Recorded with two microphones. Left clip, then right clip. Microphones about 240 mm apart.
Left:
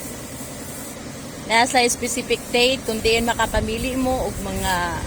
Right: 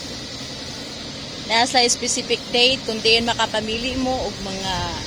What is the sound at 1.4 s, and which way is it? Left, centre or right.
Speech, centre.